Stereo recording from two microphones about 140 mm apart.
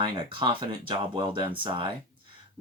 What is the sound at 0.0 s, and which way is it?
Speech, 35° right (ahead or behind).